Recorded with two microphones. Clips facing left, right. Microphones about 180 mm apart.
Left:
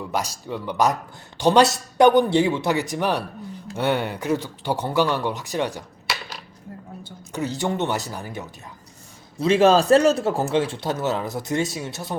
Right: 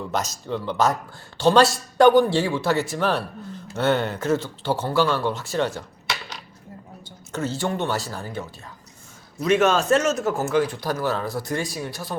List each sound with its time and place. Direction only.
0.1 s a man's voice: 10° left (ahead or behind)
7.3 s a man's voice: 15° left (ahead or behind)
9.4 s speech: 30° left (ahead or behind)